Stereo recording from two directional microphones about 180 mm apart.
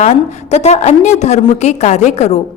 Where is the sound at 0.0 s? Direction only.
35° left (ahead or behind).